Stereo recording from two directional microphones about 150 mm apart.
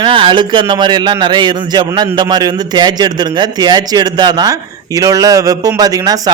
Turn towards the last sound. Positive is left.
turn(degrees=-25)  # may be behind; listen again after turning